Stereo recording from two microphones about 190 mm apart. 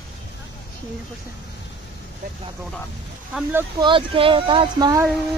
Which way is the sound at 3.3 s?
5° right (ahead or behind).